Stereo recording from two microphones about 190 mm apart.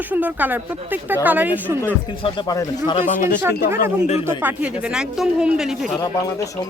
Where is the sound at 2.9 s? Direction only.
40° left (ahead or behind).